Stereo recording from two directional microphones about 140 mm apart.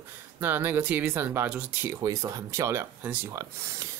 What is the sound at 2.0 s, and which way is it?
Speech, 25° right (ahead or behind).